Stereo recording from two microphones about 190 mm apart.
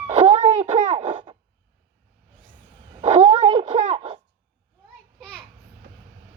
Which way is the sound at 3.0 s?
30° right (ahead or behind).